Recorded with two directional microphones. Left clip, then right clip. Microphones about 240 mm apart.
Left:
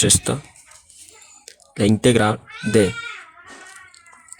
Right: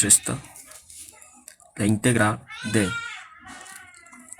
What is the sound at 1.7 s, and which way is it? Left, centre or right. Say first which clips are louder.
Speech: left 6 dB; left.